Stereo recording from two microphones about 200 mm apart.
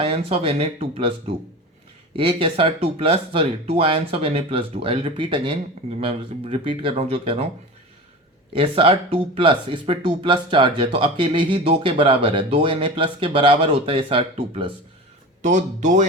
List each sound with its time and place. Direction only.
0.0 s speech: 30° right (ahead or behind)
2.1 s speech: 25° right (ahead or behind)
8.5 s speech: 25° right (ahead or behind)
15.4 s speech: 40° right (ahead or behind)